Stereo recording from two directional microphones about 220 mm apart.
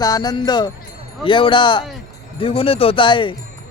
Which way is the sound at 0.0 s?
15° left (ahead or behind).